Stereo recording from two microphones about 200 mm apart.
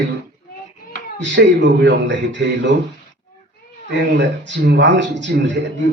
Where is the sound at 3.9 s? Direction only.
65° right (ahead or behind).